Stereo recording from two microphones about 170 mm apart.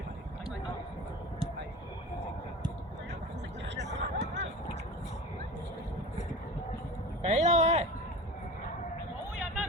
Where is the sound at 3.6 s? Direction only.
90° right.